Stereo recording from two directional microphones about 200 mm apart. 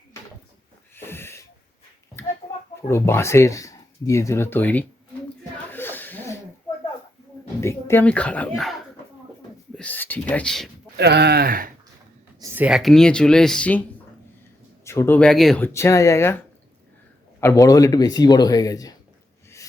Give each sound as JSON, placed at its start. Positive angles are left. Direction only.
{"t": 0.9, "sound": "wheeze", "side_deg": 10}
{"t": 2.8, "sound": "speech", "side_deg": 15}
{"t": 5.7, "sound": "a sound", "side_deg": 10}
{"t": 7.6, "sound": "speech", "side_deg": 15}
{"t": 10.9, "sound": "speech", "side_deg": -55}
{"t": 12.4, "sound": "speech", "side_deg": -5}
{"t": 14.8, "sound": "speech", "side_deg": 10}
{"t": 17.4, "sound": "speech", "side_deg": 15}